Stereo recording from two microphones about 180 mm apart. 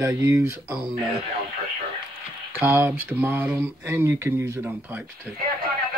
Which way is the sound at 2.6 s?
10° right (ahead or behind).